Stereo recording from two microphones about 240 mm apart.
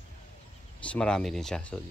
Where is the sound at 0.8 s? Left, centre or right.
Centre.